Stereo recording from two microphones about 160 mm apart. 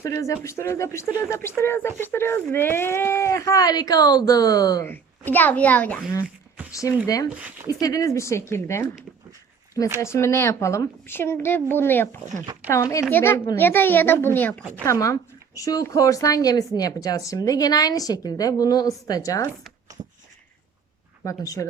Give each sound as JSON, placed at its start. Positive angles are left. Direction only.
{"t": 0.0, "sound": "speech", "side_deg": 20}
{"t": 4.9, "sound": "speech", "side_deg": 10}
{"t": 6.7, "sound": "speech", "side_deg": 20}
{"t": 7.3, "sound": "speech", "side_deg": -10}
{"t": 7.7, "sound": "speech", "side_deg": 20}
{"t": 10.0, "sound": "speech", "side_deg": 15}
{"t": 21.2, "sound": "speech", "side_deg": 20}